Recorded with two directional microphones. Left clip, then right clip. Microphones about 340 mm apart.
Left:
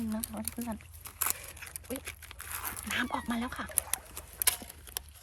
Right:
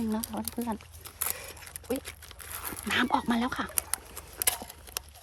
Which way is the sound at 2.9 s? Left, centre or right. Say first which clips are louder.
Right 7 dB; right.